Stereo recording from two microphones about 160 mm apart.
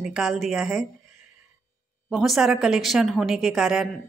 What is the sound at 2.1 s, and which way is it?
A woman's voice, centre (ahead or behind).